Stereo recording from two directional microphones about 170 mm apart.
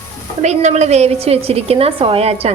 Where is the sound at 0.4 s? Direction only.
40° right (ahead or behind).